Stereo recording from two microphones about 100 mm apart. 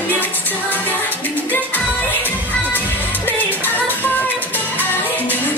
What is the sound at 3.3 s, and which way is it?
Music, 20° left (ahead or behind).